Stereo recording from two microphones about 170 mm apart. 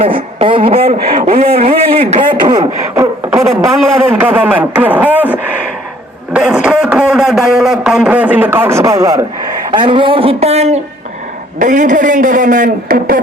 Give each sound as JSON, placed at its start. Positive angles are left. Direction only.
{"t": 0.0, "sound": "speech", "side_deg": -35}
{"t": 2.3, "sound": "speech", "side_deg": -25}
{"t": 4.1, "sound": "a sound", "side_deg": -10}
{"t": 9.7, "sound": "speech", "side_deg": -30}